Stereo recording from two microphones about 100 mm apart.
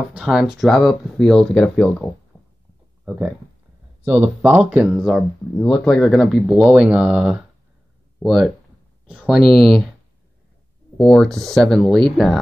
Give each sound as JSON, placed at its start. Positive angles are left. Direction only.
{"t": 0.1, "sound": "speech", "side_deg": -5}
{"t": 4.0, "sound": "speech", "side_deg": -15}
{"t": 5.0, "sound": "speech", "side_deg": 5}
{"t": 11.0, "sound": "speech", "side_deg": 5}